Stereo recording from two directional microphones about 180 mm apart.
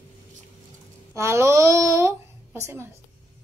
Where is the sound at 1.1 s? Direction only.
15° right (ahead or behind).